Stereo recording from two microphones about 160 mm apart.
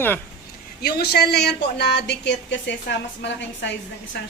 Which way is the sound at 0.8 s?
90° left.